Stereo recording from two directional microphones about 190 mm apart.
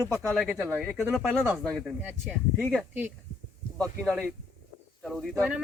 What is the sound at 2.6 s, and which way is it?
Speech, 5° left (ahead or behind).